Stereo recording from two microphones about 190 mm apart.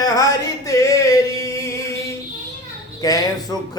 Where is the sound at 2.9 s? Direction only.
20° left (ahead or behind).